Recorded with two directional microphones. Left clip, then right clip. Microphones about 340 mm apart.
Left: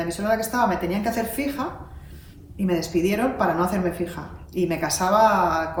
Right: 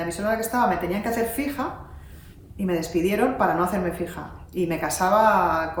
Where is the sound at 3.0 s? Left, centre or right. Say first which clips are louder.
Right 3 dB; centre.